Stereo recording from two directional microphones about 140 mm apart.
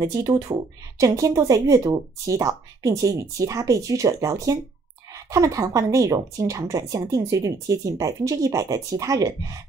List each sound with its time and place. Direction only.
0.0 s speech: 25° right (ahead or behind)